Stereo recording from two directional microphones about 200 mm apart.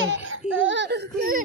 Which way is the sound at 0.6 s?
65° right (ahead or behind).